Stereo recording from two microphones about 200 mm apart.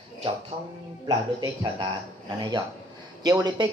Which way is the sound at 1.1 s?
20° right (ahead or behind).